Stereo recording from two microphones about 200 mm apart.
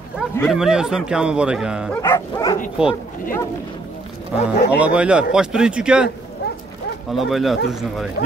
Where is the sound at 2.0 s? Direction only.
15° left (ahead or behind).